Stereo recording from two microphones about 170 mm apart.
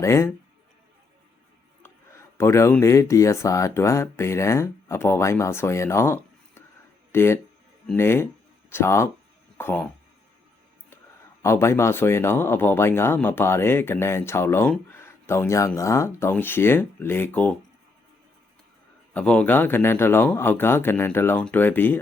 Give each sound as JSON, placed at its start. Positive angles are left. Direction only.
{"t": 0.0, "sound": "speech", "side_deg": 15}
{"t": 2.4, "sound": "speech", "side_deg": 15}
{"t": 11.4, "sound": "speech", "side_deg": 15}
{"t": 19.1, "sound": "speech", "side_deg": 5}